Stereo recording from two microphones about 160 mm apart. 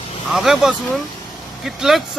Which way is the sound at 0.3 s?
Centre (ahead or behind).